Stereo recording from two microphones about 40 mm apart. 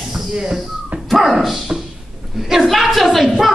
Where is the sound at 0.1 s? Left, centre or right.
Centre.